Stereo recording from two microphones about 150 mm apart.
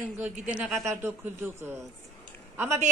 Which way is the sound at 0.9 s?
15° right (ahead or behind).